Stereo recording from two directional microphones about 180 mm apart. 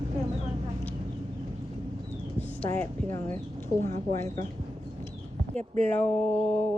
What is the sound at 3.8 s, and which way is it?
Speech, 50° right (ahead or behind).